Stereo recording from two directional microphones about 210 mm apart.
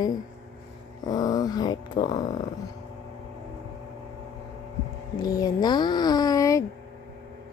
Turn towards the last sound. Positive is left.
turn(degrees=15)  # may be behind; listen again after turning